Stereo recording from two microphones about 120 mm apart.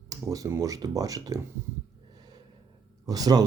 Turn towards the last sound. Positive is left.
turn(degrees=-30)  # may be behind; listen again after turning